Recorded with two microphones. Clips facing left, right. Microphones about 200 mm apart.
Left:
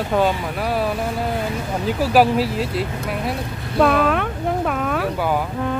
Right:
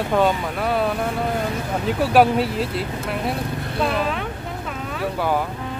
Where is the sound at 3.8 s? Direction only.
60° left (ahead or behind).